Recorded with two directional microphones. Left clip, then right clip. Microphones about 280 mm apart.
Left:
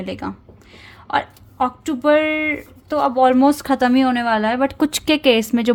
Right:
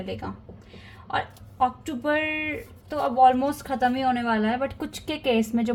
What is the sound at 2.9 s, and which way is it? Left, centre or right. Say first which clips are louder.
A woman's voice: left 4 dB; left.